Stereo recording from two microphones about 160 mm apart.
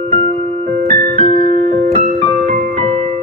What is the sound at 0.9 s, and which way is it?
Music, 40° right (ahead or behind).